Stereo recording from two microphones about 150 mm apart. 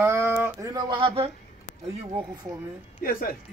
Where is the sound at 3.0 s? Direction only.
75° left (ahead or behind).